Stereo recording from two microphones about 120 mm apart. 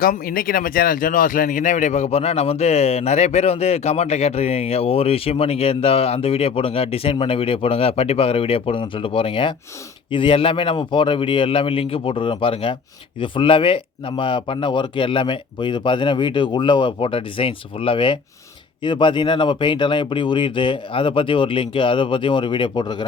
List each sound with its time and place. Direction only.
1.5 s a man's voice: 90° left; by 23.0 s 40° left (ahead or behind)